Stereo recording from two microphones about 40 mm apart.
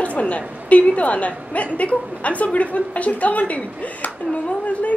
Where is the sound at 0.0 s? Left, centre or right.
Left.